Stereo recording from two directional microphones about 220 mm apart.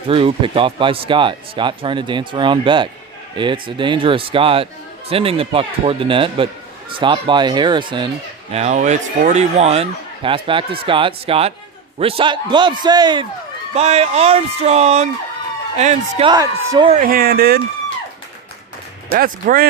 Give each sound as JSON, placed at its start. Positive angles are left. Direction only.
{"t": 0.1, "sound": "speech", "side_deg": -25}
{"t": 16.3, "sound": "a man's voice", "side_deg": -15}
{"t": 17.0, "sound": "speech", "side_deg": -40}
{"t": 19.1, "sound": "speech", "side_deg": -40}